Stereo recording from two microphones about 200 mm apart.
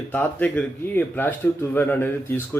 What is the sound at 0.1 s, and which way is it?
A man's voice, 10° left (ahead or behind).